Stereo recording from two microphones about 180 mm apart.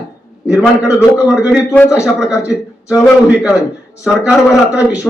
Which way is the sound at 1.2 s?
5° right (ahead or behind).